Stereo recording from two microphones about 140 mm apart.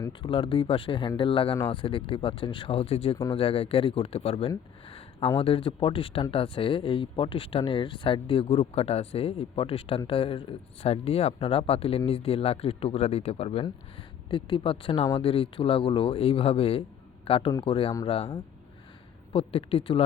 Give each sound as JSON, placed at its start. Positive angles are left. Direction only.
{"t": 0.2, "sound": "speech", "side_deg": 40}